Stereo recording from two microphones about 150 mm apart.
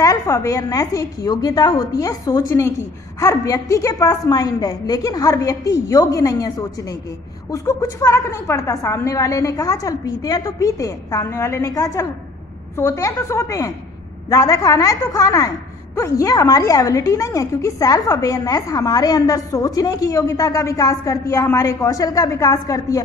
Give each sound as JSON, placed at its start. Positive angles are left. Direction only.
{"t": 0.0, "sound": "a woman's voice", "side_deg": 20}